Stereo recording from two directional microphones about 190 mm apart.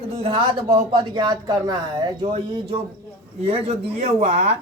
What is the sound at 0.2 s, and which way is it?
A woman's voice, 25° right (ahead or behind).